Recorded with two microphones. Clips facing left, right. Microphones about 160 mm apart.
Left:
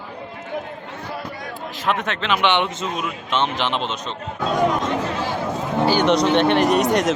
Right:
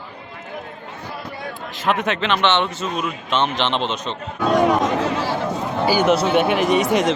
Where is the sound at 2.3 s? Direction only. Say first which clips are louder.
Left 1 dB; 10° left (ahead or behind).